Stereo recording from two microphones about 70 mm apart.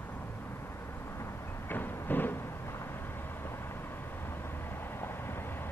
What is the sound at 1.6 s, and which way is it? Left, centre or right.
Train, left.